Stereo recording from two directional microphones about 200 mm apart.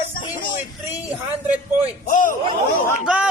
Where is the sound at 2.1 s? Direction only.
40° left (ahead or behind).